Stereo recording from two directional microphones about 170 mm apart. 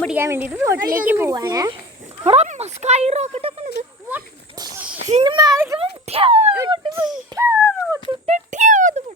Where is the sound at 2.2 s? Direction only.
40° right (ahead or behind).